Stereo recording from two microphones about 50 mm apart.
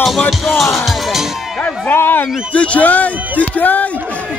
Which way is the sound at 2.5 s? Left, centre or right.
Left.